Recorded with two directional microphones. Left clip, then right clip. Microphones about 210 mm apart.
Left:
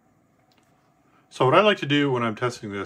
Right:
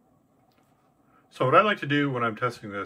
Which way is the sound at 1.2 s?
15° left (ahead or behind).